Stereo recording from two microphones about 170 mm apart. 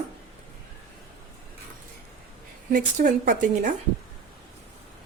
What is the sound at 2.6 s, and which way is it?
Speech, 55° right (ahead or behind).